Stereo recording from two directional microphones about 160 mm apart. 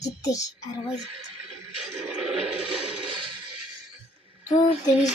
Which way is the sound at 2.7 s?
35° right (ahead or behind).